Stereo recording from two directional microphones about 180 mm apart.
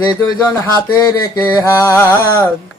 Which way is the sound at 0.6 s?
20° left (ahead or behind).